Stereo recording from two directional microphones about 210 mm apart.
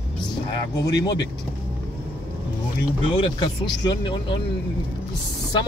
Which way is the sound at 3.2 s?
20° left (ahead or behind).